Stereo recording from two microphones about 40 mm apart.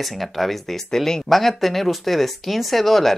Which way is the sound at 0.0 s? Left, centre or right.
Centre.